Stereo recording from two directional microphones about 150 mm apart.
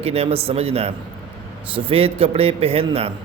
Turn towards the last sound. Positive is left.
turn(degrees=-40)  # may be behind; listen again after turning